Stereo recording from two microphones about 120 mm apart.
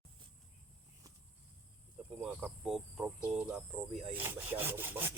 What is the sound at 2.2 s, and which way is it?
Speech, 5° right (ahead or behind).